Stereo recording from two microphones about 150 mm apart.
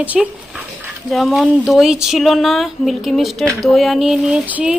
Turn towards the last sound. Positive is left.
turn(degrees=-5)  # may be behind; listen again after turning